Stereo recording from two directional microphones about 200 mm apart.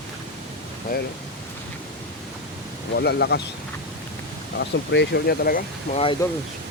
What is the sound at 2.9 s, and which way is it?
Speech, 55° left (ahead or behind).